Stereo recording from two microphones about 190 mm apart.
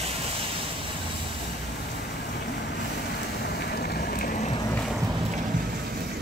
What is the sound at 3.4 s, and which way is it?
Boat, 55° left (ahead or behind).